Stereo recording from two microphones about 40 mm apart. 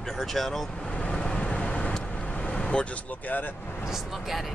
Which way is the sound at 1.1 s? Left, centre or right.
Centre.